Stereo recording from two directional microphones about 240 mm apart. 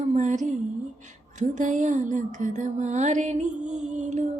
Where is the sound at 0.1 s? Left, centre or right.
Right.